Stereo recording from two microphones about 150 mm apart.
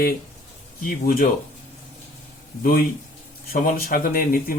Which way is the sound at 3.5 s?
75° left (ahead or behind).